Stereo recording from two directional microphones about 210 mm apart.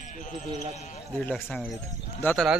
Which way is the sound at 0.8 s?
35° left (ahead or behind).